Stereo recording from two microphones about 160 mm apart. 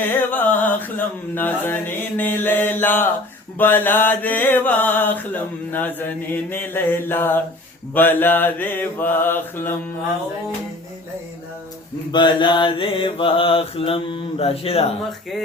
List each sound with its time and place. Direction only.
0.2 s mantra: 10° left (ahead or behind)
12.1 s mantra: 30° left (ahead or behind)